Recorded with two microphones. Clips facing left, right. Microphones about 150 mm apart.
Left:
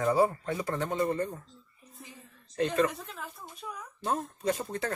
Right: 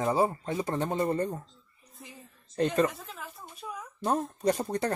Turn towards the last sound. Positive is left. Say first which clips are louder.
# right 4 dB
turn(degrees=-40)  # may be behind; listen again after turning